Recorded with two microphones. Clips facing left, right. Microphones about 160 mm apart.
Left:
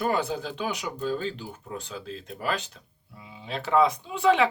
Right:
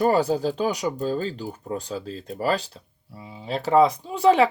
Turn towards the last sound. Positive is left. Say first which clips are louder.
# right 4 dB
turn(degrees=-40)  # may be behind; listen again after turning